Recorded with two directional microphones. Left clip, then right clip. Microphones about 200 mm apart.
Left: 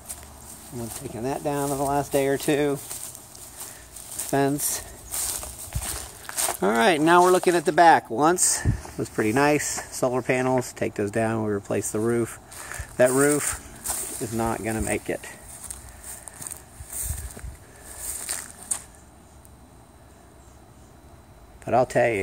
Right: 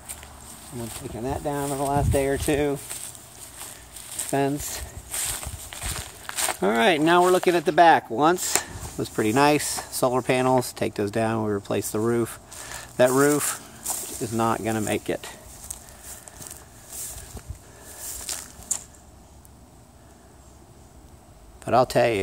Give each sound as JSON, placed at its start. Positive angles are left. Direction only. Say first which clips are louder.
{"t": 0.7, "sound": "speech", "louder": "even", "side_deg": 0}
{"t": 4.3, "sound": "speech", "louder": "left 1 dB", "side_deg": 10}
{"t": 5.1, "sound": "walk", "louder": "right 1 dB", "side_deg": 20}
{"t": 6.2, "sound": "speech", "louder": "even", "side_deg": 5}
{"t": 14.2, "sound": "speech", "louder": "right 3 dB", "side_deg": -15}
{"t": 18.0, "sound": "a sound", "louder": "even", "side_deg": 0}
{"t": 21.6, "sound": "speech", "louder": "right 1 dB", "side_deg": -10}